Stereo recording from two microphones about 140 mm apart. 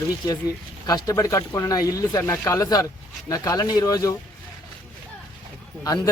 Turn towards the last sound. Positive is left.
turn(degrees=25)  # may be behind; listen again after turning